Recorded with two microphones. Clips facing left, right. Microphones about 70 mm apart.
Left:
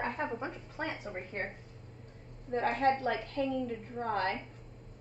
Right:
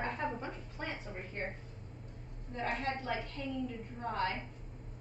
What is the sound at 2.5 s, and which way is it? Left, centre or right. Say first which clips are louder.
A woman's voice: left 8 dB; left.